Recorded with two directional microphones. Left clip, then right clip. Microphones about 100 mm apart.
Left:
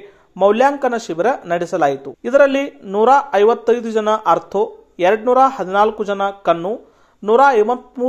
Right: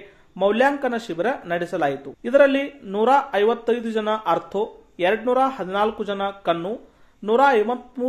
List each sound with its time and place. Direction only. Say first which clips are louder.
0.4 s speech: left 6 dB; 30° left (ahead or behind)